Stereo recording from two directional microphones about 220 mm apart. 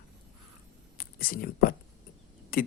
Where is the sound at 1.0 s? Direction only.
40° left (ahead or behind).